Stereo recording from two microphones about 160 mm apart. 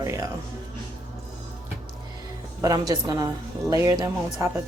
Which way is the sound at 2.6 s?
25° right (ahead or behind).